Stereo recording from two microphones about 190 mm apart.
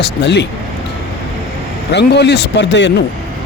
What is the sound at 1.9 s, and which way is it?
Speech, 60° left (ahead or behind).